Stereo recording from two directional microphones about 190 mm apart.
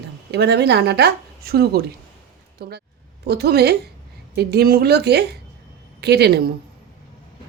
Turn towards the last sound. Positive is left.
turn(degrees=-55)  # may be behind; listen again after turning